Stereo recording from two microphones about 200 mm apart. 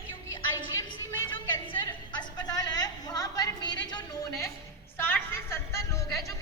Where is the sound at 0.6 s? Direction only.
15° left (ahead or behind).